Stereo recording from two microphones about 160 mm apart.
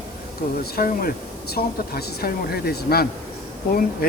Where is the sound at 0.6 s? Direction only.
70° left (ahead or behind).